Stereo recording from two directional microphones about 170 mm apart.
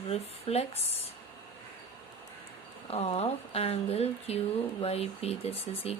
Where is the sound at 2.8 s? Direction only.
35° left (ahead or behind).